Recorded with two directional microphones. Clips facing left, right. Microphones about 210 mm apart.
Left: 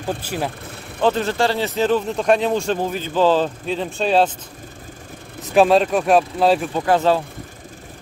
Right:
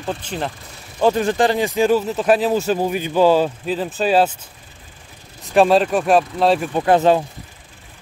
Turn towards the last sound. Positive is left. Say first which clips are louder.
# right 3 dB
turn(degrees=-20)  # may be behind; listen again after turning